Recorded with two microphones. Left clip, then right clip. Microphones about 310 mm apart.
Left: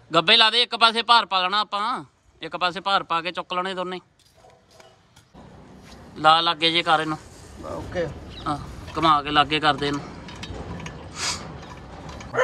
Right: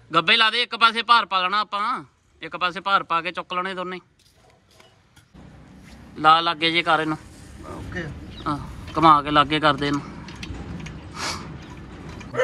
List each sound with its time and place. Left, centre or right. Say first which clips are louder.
0.1 s speech: left 1 dB; centre
6.1 s speech: right 1 dB; centre
8.5 s speech: right 1 dB; centre
11.1 s a sound: left 1 dB; centre